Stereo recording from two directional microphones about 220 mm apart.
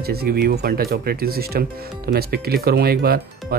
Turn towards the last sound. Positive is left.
turn(degrees=-45)  # may be behind; listen again after turning